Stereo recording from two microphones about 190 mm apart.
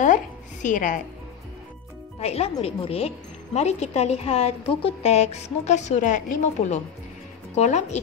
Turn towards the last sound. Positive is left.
turn(degrees=35)  # may be behind; listen again after turning